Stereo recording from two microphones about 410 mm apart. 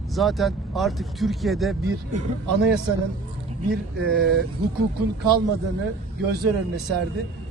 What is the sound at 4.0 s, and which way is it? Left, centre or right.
Speech, right.